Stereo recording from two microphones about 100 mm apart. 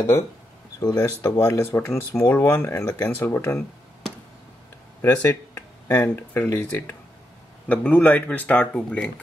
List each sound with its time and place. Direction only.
0.7 s speech: 40° left (ahead or behind)
5.0 s speech: 35° left (ahead or behind)
5.5 s a sound: 20° left (ahead or behind)
6.1 s speech: 20° left (ahead or behind)